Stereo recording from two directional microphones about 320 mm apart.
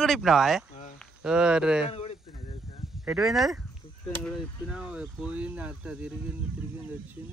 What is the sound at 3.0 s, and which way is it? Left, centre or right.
Speech, centre.